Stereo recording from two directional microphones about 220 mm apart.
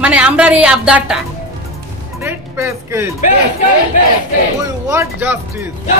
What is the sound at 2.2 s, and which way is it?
Music, 10° right (ahead or behind).